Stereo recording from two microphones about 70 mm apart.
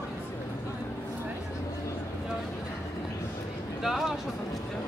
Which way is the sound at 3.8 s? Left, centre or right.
Centre.